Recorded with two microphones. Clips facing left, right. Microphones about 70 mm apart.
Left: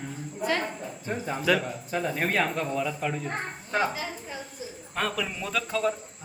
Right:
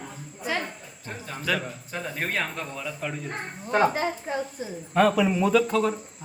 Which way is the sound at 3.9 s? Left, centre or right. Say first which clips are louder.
Right 8 dB; right.